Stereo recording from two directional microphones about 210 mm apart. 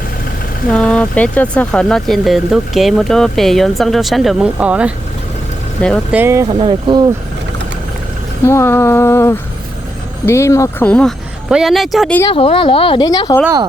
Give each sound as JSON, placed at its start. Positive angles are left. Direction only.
{"t": 0.7, "sound": "speech", "side_deg": 5}
{"t": 6.1, "sound": "speech", "side_deg": -10}
{"t": 6.6, "sound": "speech", "side_deg": -25}
{"t": 8.4, "sound": "a sound", "side_deg": 10}
{"t": 10.2, "sound": "speech", "side_deg": 15}
{"t": 12.2, "sound": "speech", "side_deg": 25}